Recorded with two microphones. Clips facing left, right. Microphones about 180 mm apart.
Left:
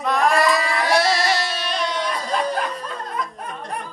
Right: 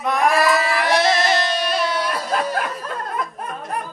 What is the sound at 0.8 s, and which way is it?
Music, 20° right (ahead or behind).